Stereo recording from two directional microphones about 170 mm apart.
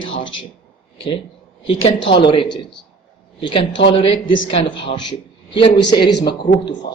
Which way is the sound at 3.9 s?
35° left (ahead or behind).